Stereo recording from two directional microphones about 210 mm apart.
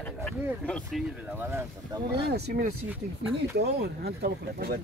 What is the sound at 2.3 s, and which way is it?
Speech, 50° right (ahead or behind).